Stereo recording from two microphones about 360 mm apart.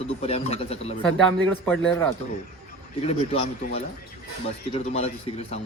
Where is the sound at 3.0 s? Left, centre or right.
Centre.